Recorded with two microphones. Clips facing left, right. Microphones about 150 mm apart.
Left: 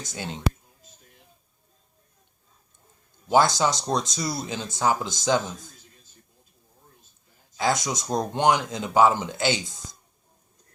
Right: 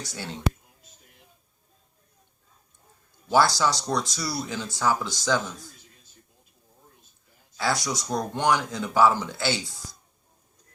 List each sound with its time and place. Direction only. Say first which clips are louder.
0.0 s speech: left 1 dB; 20° left (ahead or behind)
3.2 s speech: left 1 dB; 20° left (ahead or behind)
7.5 s speech: left 2 dB; 20° left (ahead or behind)